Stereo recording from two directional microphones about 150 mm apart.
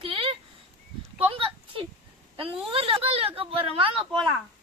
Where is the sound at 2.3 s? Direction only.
35° right (ahead or behind).